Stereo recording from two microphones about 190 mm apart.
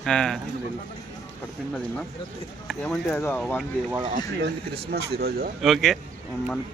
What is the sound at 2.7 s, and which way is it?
Speech, centre (ahead or behind).